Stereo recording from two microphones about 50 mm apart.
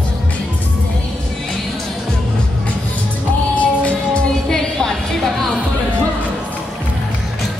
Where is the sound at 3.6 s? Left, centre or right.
Left.